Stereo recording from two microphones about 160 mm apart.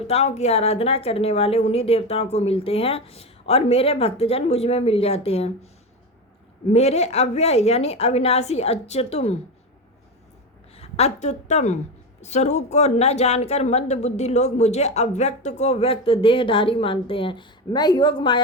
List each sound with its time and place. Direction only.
0.0 s speech: 40° left (ahead or behind)
6.7 s speech: 40° left (ahead or behind)
10.8 s a woman's voice: 40° left (ahead or behind)